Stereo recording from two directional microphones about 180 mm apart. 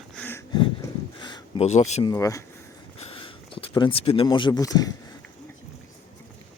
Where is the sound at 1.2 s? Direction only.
25° left (ahead or behind).